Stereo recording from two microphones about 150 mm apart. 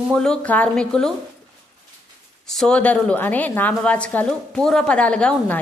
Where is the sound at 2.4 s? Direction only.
Centre (ahead or behind).